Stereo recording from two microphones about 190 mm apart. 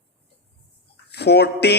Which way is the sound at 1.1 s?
60° left (ahead or behind).